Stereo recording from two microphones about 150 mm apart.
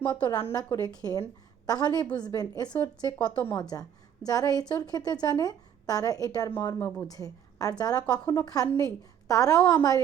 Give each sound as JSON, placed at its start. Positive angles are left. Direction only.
{"t": 0.1, "sound": "a woman's voice", "side_deg": 30}
{"t": 6.7, "sound": "a woman's voice", "side_deg": 15}